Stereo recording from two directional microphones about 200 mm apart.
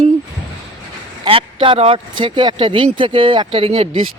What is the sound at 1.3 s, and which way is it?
Speech, 25° right (ahead or behind).